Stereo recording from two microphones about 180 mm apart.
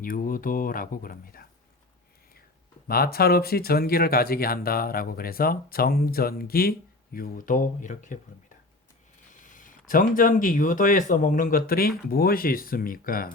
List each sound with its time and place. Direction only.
0.0 s speech: 50° left (ahead or behind)
2.8 s speech: 60° left (ahead or behind)
9.3 s speech: 45° left (ahead or behind)